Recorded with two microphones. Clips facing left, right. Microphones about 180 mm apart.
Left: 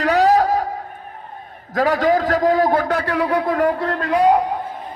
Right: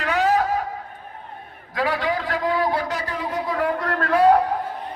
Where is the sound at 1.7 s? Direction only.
40° left (ahead or behind).